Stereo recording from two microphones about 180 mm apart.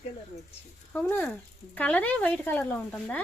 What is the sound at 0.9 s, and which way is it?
Speech, 10° left (ahead or behind).